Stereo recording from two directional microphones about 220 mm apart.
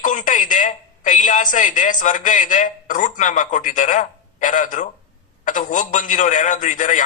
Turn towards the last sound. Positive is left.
turn(degrees=35)  # may be behind; listen again after turning